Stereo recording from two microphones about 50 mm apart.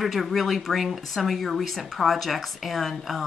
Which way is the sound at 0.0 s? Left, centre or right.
Centre.